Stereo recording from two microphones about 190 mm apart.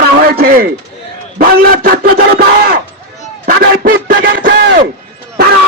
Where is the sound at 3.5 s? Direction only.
50° right (ahead or behind).